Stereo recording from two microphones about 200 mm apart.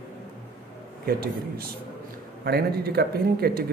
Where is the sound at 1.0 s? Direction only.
50° right (ahead or behind).